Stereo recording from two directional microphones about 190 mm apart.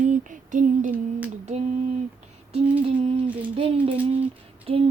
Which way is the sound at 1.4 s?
35° right (ahead or behind).